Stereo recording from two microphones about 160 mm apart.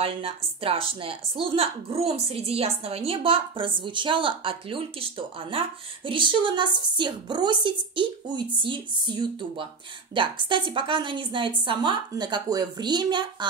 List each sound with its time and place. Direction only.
0.0 s a woman's voice: 35° right (ahead or behind)